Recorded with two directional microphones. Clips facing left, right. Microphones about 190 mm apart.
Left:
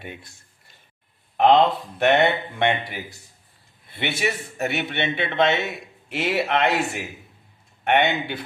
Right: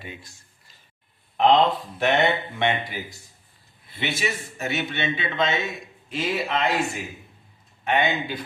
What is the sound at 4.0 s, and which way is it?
A man's voice, 60° left (ahead or behind).